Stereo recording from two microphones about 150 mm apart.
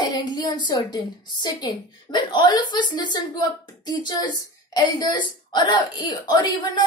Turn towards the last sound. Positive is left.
turn(degrees=30)  # may be behind; listen again after turning